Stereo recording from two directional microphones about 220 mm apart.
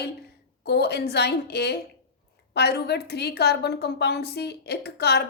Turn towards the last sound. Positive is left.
turn(degrees=50)  # may be behind; listen again after turning